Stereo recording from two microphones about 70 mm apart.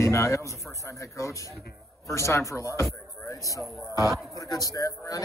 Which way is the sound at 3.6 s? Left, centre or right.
Centre.